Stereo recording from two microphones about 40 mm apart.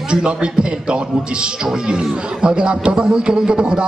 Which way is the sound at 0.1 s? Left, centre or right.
Right.